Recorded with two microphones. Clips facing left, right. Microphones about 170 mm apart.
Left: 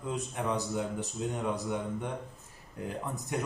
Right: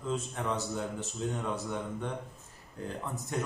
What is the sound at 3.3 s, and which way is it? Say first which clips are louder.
Speech: left 1 dB; 15° left (ahead or behind).